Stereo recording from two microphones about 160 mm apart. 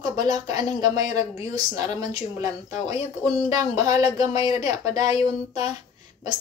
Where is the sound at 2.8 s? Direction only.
45° left (ahead or behind).